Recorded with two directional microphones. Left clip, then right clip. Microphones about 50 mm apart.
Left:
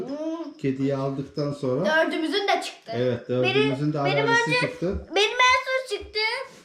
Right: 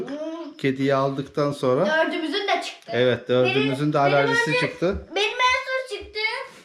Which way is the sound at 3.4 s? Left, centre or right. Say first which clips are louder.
Right 1 dB; left.